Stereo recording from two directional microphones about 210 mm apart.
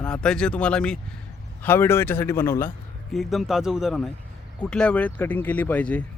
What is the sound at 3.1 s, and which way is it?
Speech, centre (ahead or behind).